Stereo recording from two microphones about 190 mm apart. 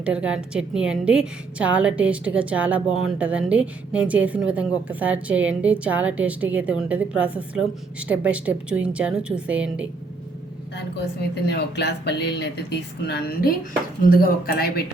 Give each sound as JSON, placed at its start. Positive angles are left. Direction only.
{"t": 0.0, "sound": "speech", "side_deg": -5}
{"t": 11.4, "sound": "speech", "side_deg": 60}